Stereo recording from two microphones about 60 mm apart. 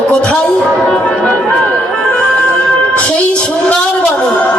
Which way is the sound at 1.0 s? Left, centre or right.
Left.